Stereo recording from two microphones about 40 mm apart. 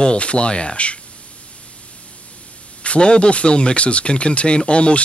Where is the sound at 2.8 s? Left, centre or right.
Left.